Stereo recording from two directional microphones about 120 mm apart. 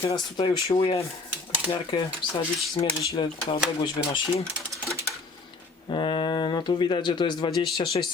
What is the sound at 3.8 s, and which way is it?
Speech, 50° left (ahead or behind).